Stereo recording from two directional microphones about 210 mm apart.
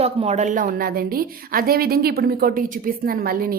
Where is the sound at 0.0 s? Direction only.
30° right (ahead or behind).